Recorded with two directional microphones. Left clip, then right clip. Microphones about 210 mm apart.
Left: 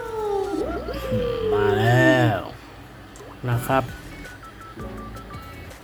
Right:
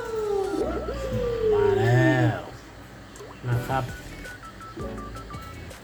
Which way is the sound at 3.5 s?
55° left (ahead or behind).